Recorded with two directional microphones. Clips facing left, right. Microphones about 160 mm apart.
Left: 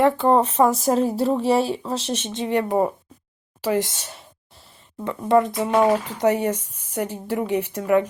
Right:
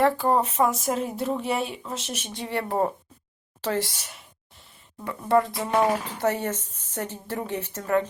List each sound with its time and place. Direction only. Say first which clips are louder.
0.0 s speech: left 4 dB; 20° left (ahead or behind)
5.2 s speech: left 4 dB; 20° left (ahead or behind)